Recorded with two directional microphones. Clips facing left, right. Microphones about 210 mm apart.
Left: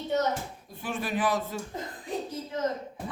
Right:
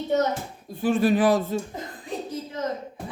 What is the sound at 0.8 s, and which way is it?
Speech, 30° right (ahead or behind).